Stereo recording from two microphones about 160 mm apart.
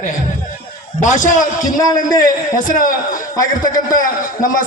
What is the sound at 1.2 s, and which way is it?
A man's voice, 55° left (ahead or behind).